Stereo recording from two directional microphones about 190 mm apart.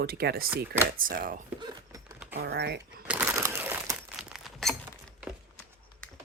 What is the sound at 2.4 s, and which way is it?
Speech, 60° right (ahead or behind).